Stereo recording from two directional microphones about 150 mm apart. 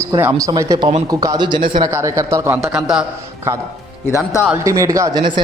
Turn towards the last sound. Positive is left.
turn(degrees=-25)  # may be behind; listen again after turning